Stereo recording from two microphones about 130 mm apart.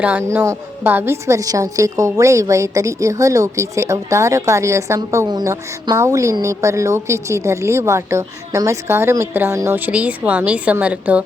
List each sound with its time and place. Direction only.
0.0 s a woman's voice: 15° right (ahead or behind)